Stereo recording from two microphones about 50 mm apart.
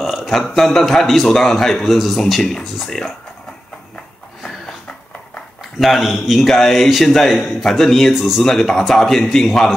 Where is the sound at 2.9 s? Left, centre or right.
Centre.